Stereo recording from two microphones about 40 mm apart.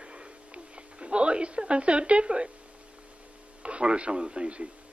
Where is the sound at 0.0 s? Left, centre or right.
Right.